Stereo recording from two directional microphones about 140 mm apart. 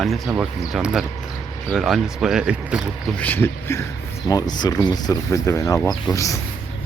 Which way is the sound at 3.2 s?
15° left (ahead or behind).